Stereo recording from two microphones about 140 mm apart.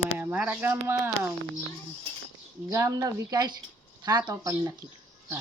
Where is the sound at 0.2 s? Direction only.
15° right (ahead or behind).